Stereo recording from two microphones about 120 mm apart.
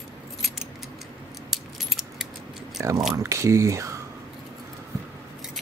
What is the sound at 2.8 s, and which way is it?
Speech, 25° right (ahead or behind).